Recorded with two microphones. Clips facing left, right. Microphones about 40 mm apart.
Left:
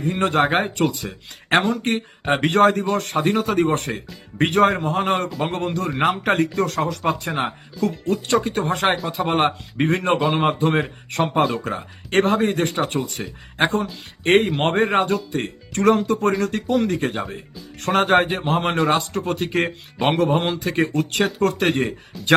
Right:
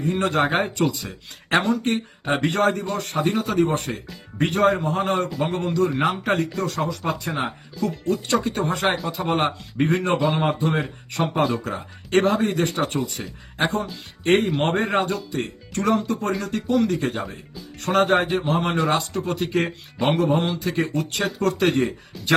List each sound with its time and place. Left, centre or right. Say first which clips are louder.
0.0 s speech: left 2 dB; left
5.0 s speech: left 1 dB; left
7.4 s speech: left 3 dB; left